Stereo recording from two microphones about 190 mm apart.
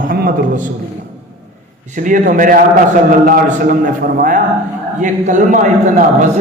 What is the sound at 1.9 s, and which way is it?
A man's voice, 45° right (ahead or behind).